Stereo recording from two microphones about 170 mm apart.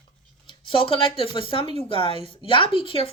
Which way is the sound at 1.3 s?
30° left (ahead or behind).